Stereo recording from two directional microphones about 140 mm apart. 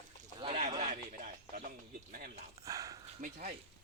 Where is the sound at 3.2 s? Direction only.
70° right (ahead or behind).